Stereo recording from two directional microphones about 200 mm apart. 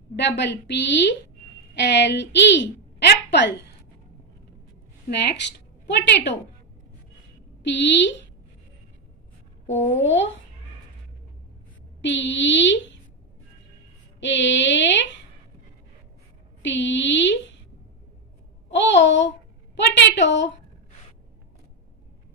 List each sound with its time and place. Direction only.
0.1 s a woman's voice: 60° left (ahead or behind)
5.1 s a woman's voice: 60° left (ahead or behind)
7.6 s a woman's voice: 65° left (ahead or behind)
9.8 s speech: 10° left (ahead or behind)
12.0 s a woman's voice: 65° left (ahead or behind)
14.2 s a woman's voice: 65° left (ahead or behind)
16.6 s a woman's voice: 65° left (ahead or behind)
18.7 s a child's voice: 60° left (ahead or behind)